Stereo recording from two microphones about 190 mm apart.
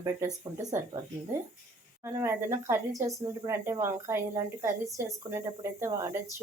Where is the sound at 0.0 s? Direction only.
15° right (ahead or behind).